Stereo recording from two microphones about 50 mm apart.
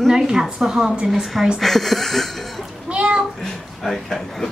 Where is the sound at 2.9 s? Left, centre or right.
Right.